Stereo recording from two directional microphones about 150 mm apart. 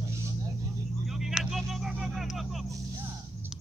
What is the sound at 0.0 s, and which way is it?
Vehicle, 20° right (ahead or behind).